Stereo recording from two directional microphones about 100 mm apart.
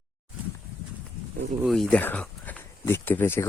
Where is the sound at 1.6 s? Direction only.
Centre (ahead or behind).